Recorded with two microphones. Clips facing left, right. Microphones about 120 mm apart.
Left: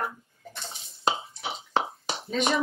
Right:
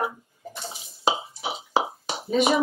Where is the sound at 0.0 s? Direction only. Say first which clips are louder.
Right 4 dB; 10° right (ahead or behind).